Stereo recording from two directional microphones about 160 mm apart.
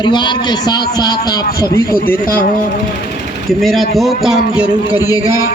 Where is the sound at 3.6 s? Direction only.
Centre (ahead or behind).